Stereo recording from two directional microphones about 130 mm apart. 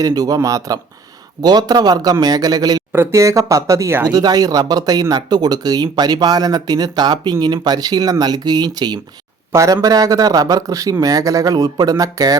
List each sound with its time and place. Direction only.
0.0 s a man's voice: 30° right (ahead or behind)